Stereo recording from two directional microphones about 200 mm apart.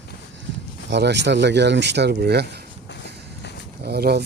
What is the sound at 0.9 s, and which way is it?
Speech, 60° right (ahead or behind).